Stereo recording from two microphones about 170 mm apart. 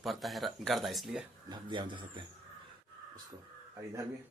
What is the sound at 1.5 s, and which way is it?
Speech, 30° right (ahead or behind).